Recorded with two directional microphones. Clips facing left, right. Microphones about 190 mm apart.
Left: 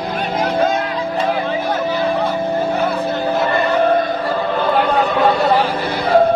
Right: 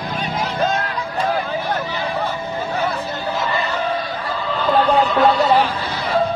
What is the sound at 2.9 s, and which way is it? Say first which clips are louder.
Chatter: left 6 dB; 55° left (ahead or behind).